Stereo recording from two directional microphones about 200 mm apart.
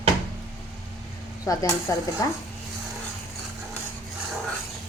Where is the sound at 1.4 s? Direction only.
15° left (ahead or behind).